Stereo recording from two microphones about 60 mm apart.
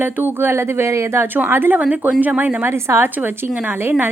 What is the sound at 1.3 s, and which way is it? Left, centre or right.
Speech, right.